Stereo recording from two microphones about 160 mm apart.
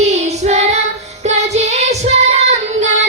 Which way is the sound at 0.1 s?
45° right (ahead or behind).